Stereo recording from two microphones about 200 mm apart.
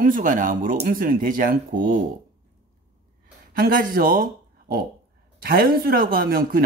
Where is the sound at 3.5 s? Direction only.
45° right (ahead or behind).